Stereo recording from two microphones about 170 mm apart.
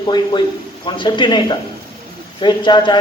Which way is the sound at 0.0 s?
25° left (ahead or behind).